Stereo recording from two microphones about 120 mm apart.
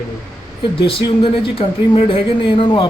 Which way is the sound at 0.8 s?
50° left (ahead or behind).